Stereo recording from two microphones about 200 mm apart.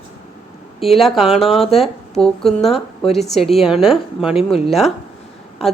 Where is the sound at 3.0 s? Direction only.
30° left (ahead or behind).